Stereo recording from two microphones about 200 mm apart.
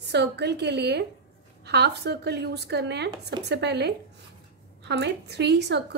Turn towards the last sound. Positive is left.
turn(degrees=-55)  # may be behind; listen again after turning